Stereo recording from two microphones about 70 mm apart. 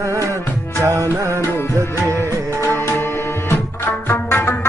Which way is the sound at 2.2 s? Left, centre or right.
Left.